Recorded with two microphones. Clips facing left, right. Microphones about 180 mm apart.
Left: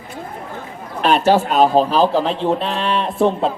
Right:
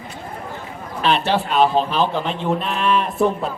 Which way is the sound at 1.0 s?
45° left (ahead or behind).